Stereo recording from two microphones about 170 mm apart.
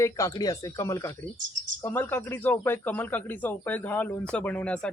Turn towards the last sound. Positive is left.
turn(degrees=5)  # may be behind; listen again after turning